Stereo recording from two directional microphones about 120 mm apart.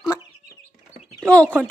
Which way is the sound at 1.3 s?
10° left (ahead or behind).